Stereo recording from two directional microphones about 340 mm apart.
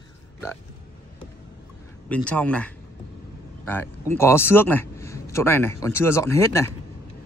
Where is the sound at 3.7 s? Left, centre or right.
Centre.